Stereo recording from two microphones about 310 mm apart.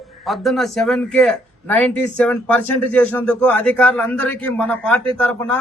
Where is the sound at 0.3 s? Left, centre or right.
Centre.